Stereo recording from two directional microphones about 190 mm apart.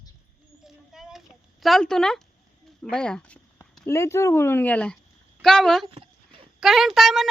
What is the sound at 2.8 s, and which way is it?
Speech, 5° left (ahead or behind).